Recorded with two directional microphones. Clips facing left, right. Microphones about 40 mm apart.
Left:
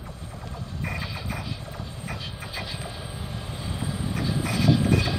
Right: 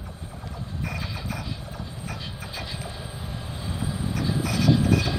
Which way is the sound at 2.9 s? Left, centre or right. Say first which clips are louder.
Even; centre.